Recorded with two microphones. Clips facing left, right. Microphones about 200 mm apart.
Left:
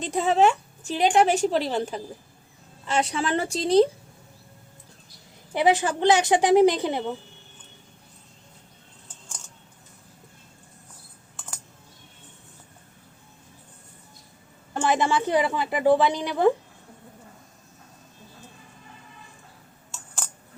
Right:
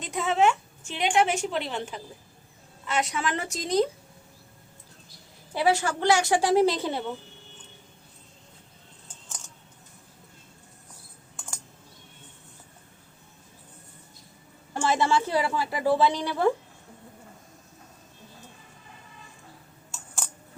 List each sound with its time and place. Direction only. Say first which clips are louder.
0.0 s a woman's voice: left 3 dB; 35° left (ahead or behind)
5.5 s a woman's voice: left 3 dB; 20° left (ahead or behind)
14.8 s a woman's voice: left 1 dB; 15° left (ahead or behind)